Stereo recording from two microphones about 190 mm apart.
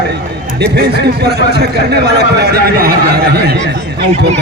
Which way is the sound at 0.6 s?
60° right (ahead or behind).